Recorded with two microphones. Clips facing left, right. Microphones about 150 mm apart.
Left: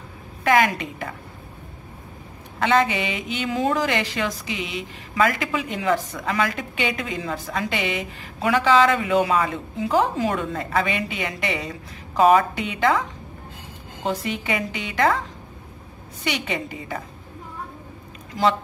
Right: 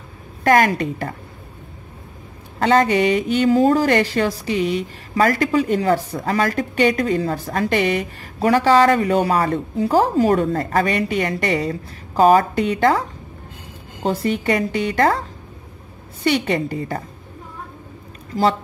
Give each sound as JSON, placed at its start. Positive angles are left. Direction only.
{"t": 0.4, "sound": "a woman's voice", "side_deg": -40}
{"t": 2.6, "sound": "a woman's voice", "side_deg": -40}
{"t": 14.0, "sound": "a woman's voice", "side_deg": -40}
{"t": 16.3, "sound": "a woman's voice", "side_deg": -45}
{"t": 18.3, "sound": "speech", "side_deg": -40}